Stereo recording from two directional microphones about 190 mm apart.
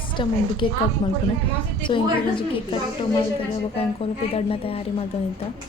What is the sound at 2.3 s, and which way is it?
A woman's voice, 25° left (ahead or behind).